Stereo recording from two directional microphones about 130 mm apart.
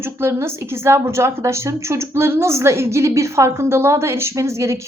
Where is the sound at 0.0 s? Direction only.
20° right (ahead or behind).